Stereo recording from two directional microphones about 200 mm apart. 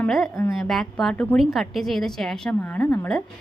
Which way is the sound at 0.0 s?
Centre (ahead or behind).